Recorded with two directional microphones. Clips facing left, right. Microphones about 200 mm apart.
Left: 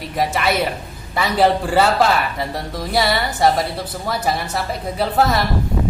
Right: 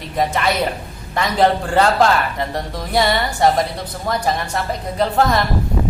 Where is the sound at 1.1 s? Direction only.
5° left (ahead or behind).